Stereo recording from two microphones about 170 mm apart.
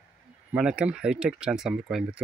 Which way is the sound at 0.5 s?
5° right (ahead or behind).